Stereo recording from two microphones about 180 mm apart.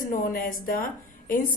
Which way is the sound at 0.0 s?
50° left (ahead or behind).